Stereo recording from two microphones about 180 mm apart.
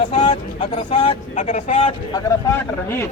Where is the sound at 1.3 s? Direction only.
40° left (ahead or behind).